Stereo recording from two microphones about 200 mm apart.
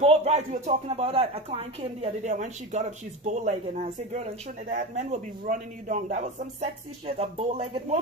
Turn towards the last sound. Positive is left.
turn(degrees=-30)  # may be behind; listen again after turning